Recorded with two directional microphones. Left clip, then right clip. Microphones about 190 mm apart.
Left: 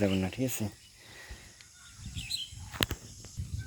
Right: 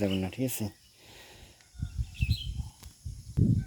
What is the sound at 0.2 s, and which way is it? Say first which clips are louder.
Speech: even; 15° right (ahead or behind).